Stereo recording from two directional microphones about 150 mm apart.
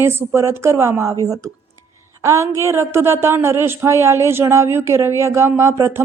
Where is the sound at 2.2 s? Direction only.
20° right (ahead or behind).